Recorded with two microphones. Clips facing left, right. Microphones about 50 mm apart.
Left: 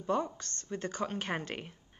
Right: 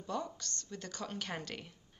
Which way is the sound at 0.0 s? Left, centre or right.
Left.